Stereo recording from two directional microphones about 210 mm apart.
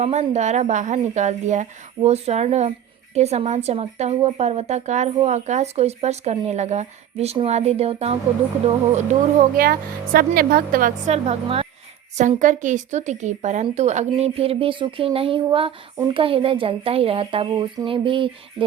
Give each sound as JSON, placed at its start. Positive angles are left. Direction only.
{"t": 0.0, "sound": "a woman's voice", "side_deg": -30}
{"t": 9.6, "sound": "a woman's voice", "side_deg": -45}